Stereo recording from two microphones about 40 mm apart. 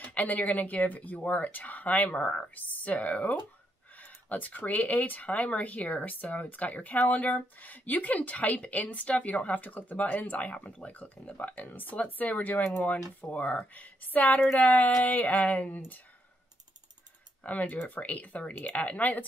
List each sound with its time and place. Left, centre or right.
0.0 s speech: left
2.5 s speech: left
10.9 s speech: left
17.4 s speech: left
18.8 s speech: left